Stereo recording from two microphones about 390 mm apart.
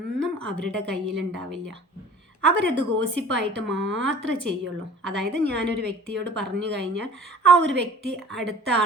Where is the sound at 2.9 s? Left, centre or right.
Right.